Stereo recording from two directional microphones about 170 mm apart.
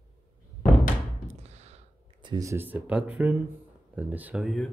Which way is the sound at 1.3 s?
40° right (ahead or behind).